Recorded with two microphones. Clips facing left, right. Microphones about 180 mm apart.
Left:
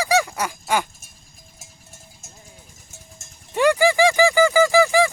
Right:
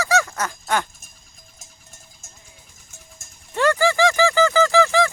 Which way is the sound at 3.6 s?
15° left (ahead or behind).